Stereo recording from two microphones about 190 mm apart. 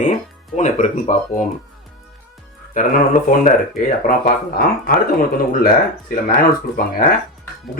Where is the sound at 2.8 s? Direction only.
45° left (ahead or behind).